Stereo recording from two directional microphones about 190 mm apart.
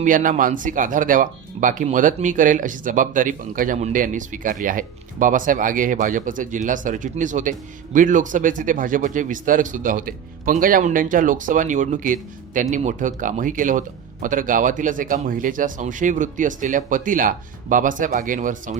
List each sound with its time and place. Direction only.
0.0 s speech: 45° right (ahead or behind)